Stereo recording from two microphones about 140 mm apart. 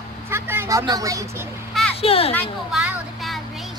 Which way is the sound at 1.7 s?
Centre (ahead or behind).